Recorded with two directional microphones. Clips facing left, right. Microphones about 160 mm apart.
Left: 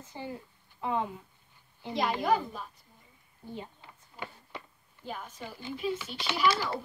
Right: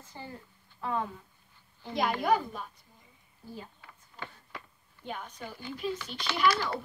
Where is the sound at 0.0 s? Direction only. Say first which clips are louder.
Left 4 dB; 15° left (ahead or behind).